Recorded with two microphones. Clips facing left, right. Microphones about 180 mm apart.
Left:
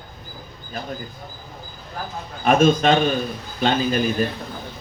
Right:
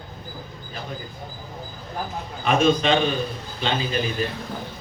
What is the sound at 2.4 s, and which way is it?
A man's voice, 45° left (ahead or behind).